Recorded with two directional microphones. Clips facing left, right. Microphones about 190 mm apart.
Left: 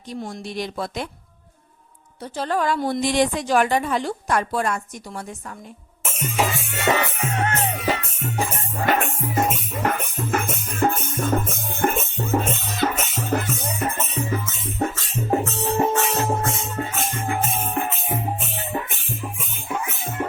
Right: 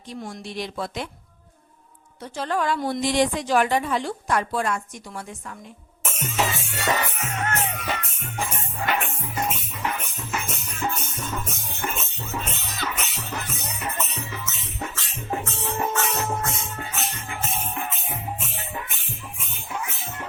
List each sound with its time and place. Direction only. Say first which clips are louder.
0.1 s speech: left 3 dB; 40° left (ahead or behind)
2.2 s a woman's voice: left 2 dB; 35° left (ahead or behind)
6.1 s music: left 2 dB; 5° left (ahead or behind)
6.8 s speech: left 4 dB; 30° left (ahead or behind)
7.9 s music: left 6 dB; 40° left (ahead or behind)
17.8 s music: left 6 dB; 35° left (ahead or behind)
19.2 s music: left 6 dB; 50° left (ahead or behind)